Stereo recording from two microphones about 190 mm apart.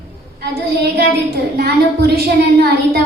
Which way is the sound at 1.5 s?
55° right (ahead or behind).